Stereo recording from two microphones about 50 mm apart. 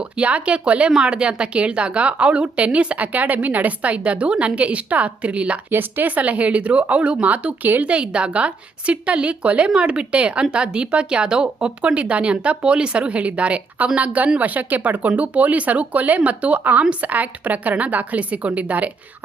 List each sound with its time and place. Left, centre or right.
0.0 s a woman's voice: right
5.7 s a woman's voice: right
7.9 s a woman's voice: right